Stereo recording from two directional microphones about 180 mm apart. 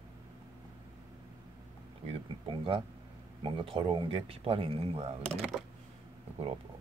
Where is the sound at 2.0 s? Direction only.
30° right (ahead or behind).